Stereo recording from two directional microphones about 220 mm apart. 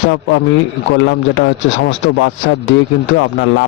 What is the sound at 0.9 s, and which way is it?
Speech, 60° left (ahead or behind).